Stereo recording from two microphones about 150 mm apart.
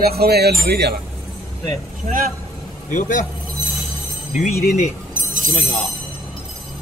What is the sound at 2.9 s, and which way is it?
Speech, 55° left (ahead or behind).